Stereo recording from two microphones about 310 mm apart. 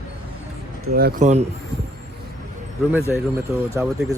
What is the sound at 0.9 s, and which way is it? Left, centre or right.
Speech, right.